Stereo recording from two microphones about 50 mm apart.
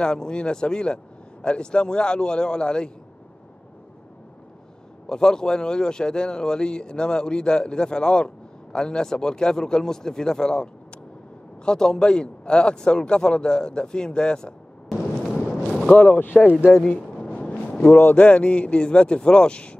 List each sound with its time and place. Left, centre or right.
0.0 s speech: centre
5.0 s speech: centre
15.0 s fireworks: centre
15.9 s speech: left
16.7 s a sound: centre
18.1 s a man's voice: left